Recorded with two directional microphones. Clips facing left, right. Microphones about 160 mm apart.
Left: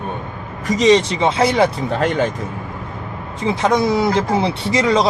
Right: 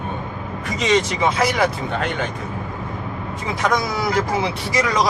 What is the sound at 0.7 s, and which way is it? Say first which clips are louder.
Speech: left 6 dB; 35° left (ahead or behind).